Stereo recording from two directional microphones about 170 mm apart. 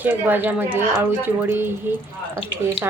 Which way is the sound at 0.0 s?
10° right (ahead or behind).